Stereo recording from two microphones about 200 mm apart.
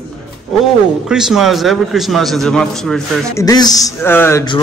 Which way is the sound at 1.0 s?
5° right (ahead or behind).